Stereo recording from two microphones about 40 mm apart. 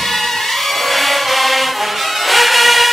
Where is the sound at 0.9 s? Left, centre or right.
Centre.